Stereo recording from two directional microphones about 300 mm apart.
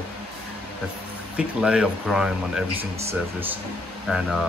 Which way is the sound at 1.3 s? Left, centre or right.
Centre.